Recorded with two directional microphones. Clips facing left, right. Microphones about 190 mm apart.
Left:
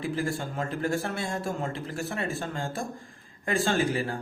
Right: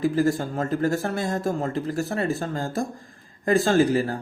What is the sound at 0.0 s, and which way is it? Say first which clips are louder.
Speech: right 8 dB; 40° right (ahead or behind).